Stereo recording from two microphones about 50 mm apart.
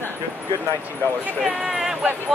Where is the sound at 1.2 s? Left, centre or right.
Centre.